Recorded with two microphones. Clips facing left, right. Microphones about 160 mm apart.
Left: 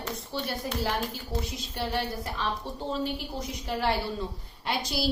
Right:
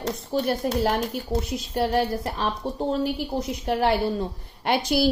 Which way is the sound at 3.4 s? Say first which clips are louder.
Right 9 dB; 60° right (ahead or behind).